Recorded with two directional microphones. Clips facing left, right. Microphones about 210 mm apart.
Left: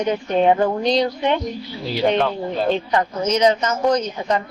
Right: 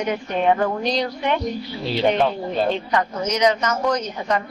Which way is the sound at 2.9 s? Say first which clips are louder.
Left 3 dB; 30° left (ahead or behind).